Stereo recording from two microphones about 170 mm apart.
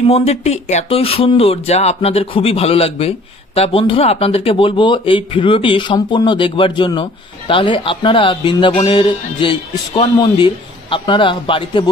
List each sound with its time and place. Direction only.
0.1 s speech: 40° left (ahead or behind)